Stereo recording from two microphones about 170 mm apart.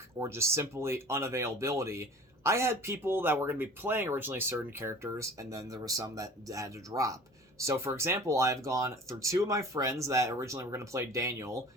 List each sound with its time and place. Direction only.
0.2 s speech: 15° right (ahead or behind)